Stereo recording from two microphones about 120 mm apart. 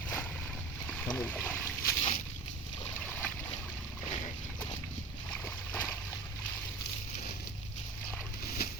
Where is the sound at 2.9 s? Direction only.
15° left (ahead or behind).